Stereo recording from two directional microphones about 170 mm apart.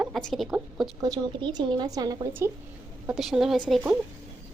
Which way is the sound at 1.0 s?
20° right (ahead or behind).